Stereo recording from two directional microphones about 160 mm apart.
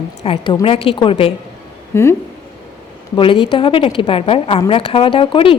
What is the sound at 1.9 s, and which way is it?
Speech, 15° left (ahead or behind).